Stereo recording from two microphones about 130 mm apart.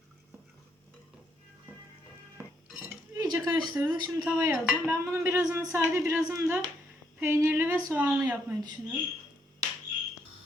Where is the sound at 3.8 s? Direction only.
15° right (ahead or behind).